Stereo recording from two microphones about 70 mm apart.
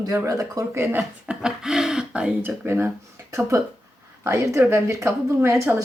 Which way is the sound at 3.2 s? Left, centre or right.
Right.